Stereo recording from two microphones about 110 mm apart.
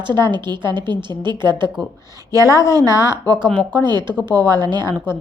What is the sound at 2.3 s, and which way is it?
Speech, 30° right (ahead or behind).